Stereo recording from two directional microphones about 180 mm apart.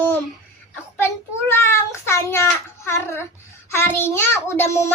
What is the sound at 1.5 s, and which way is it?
A child's voice, 15° left (ahead or behind).